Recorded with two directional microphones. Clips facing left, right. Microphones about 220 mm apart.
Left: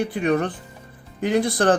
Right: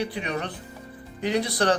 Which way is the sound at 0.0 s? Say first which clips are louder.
Left 8 dB; 50° left (ahead or behind).